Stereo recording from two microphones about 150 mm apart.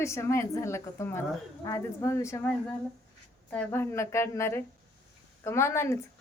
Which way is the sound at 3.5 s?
10° left (ahead or behind).